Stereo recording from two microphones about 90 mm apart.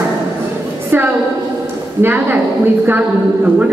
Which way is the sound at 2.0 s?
20° right (ahead or behind).